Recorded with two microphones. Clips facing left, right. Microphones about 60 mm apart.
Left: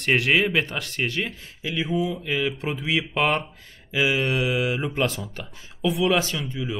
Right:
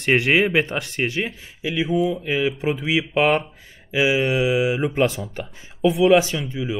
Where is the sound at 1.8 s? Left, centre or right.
Centre.